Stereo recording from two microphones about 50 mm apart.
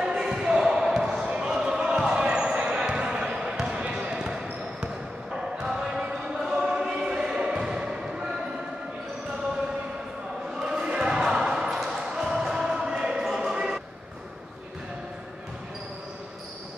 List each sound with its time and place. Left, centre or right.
0.0 s basketball bounce: centre
7.2 s music: centre
10.6 s basketball bounce: centre